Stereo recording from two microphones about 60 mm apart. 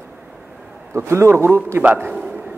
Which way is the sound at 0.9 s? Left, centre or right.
Right.